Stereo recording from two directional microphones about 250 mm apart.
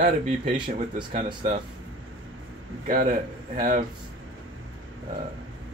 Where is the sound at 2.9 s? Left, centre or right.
Right.